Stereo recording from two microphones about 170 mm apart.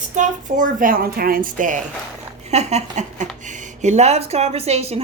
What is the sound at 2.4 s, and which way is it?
Speech, 40° right (ahead or behind).